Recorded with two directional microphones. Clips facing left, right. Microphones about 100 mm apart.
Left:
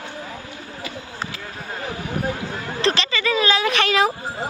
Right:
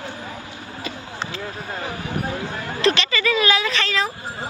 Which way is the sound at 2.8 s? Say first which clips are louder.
Right 2 dB; 35° left (ahead or behind).